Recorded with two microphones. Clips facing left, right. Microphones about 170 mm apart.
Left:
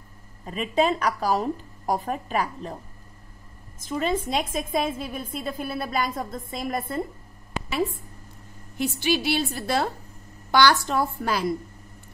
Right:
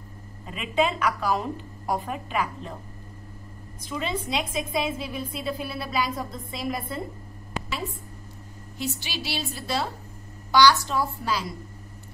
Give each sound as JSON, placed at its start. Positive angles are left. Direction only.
{"t": 0.5, "sound": "a woman's voice", "side_deg": 40}
{"t": 3.8, "sound": "a woman's voice", "side_deg": 45}
{"t": 8.7, "sound": "a woman's voice", "side_deg": 55}